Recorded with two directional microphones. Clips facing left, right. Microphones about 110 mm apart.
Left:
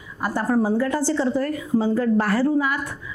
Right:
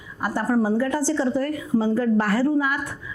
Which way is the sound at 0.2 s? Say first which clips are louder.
Left 1 dB; 25° left (ahead or behind).